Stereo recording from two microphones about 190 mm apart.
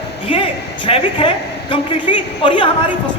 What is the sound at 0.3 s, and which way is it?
A woman's voice, 25° left (ahead or behind).